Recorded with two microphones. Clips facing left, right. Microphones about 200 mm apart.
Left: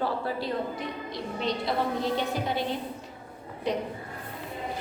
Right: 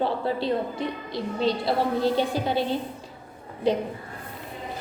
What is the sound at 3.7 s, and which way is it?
Speech, 30° right (ahead or behind).